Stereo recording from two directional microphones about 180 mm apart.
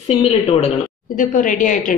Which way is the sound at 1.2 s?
45° left (ahead or behind).